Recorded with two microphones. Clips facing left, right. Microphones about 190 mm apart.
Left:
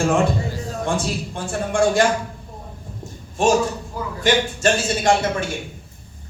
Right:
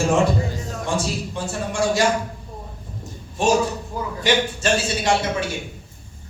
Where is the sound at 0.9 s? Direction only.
55° left (ahead or behind).